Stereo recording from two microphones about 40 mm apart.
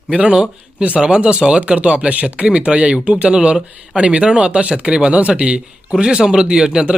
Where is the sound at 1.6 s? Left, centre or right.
Right.